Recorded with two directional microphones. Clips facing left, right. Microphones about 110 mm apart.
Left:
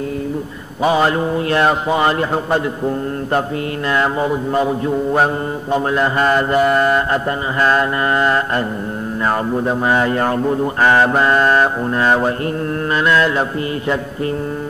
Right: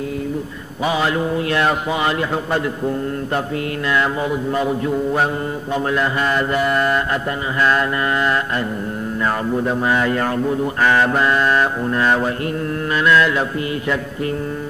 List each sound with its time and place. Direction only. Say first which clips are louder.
0.8 s mantra: left 4 dB; 35° left (ahead or behind)